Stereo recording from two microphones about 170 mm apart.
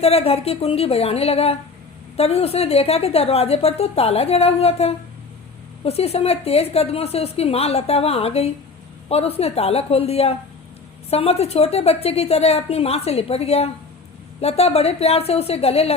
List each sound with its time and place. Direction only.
0.0 s a woman's voice: 35° left (ahead or behind)